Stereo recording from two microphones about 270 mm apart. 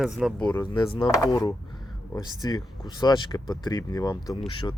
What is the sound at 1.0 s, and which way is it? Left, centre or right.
Speech, centre.